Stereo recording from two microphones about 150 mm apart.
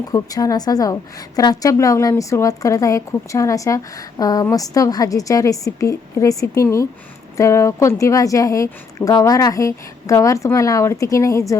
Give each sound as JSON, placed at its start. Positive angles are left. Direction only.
{"t": 0.1, "sound": "a woman's voice", "side_deg": 25}